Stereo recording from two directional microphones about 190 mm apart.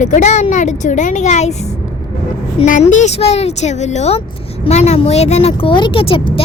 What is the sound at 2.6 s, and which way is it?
Speech, 40° left (ahead or behind).